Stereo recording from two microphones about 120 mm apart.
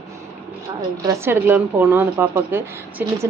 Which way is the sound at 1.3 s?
15° right (ahead or behind).